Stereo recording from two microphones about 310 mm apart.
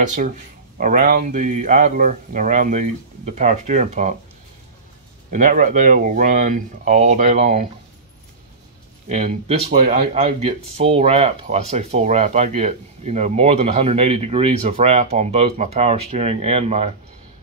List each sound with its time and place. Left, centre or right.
0.0 s speech: right
5.3 s speech: right
9.1 s speech: right